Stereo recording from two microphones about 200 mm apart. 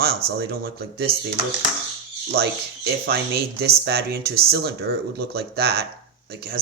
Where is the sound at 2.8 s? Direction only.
55° right (ahead or behind).